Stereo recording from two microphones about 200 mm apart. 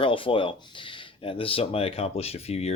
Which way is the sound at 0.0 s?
25° left (ahead or behind).